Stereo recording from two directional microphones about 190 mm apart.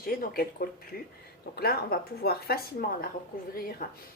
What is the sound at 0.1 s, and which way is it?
Speech, 50° left (ahead or behind).